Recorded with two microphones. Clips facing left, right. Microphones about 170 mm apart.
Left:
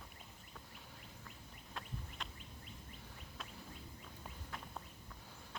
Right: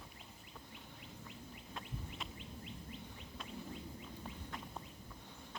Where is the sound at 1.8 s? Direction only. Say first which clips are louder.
Even; centre (ahead or behind).